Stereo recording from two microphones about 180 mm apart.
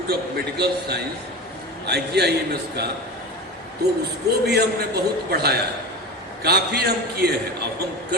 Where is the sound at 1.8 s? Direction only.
65° right (ahead or behind).